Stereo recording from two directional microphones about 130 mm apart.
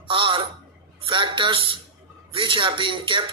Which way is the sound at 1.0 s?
40° right (ahead or behind).